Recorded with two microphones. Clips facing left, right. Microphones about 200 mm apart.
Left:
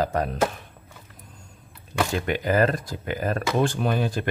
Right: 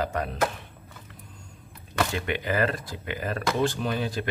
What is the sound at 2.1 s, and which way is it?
A man's voice, 40° left (ahead or behind).